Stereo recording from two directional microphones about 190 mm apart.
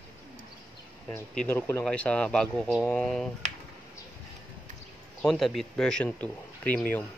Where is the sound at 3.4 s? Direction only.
40° right (ahead or behind).